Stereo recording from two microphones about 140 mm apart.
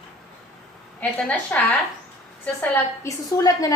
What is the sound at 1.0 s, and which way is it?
Speech, 10° left (ahead or behind).